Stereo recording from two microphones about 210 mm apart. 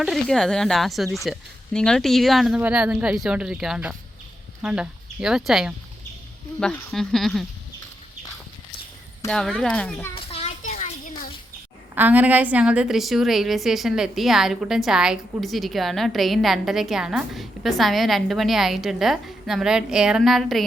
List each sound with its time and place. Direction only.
0.0 s a woman's voice: centre (ahead or behind)
9.3 s a woman's voice: 5° left (ahead or behind)
10.2 s a sound: 30° left (ahead or behind)
11.9 s a woman's voice: 10° right (ahead or behind)